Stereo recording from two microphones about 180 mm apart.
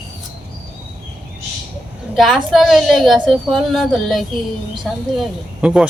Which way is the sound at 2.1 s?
Centre (ahead or behind).